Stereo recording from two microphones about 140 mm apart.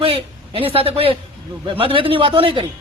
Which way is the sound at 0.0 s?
45° right (ahead or behind).